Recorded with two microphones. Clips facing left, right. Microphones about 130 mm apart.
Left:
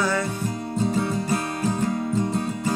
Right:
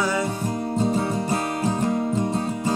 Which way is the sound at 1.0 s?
30° right (ahead or behind).